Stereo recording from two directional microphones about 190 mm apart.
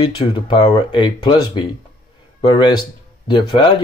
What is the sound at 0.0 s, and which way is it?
Speech, 25° left (ahead or behind).